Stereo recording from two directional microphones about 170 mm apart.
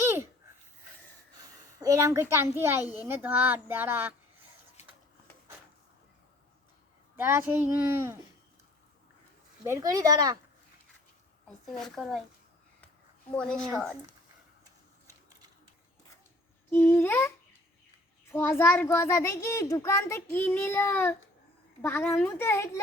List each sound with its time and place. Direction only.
0.0 s a sound: 15° right (ahead or behind)
1.4 s a sound: 20° right (ahead or behind)
2.3 s speech: 15° right (ahead or behind)
7.2 s speech: 10° right (ahead or behind)
9.6 s speech: 20° right (ahead or behind)
11.4 s speech: centre (ahead or behind)
13.3 s speech: 5° left (ahead or behind)
16.7 s a child's voice: 10° left (ahead or behind)